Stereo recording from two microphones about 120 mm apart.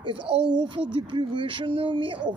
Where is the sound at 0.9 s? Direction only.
45° right (ahead or behind).